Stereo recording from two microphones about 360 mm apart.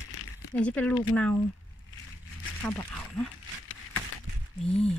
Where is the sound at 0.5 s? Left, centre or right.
Centre.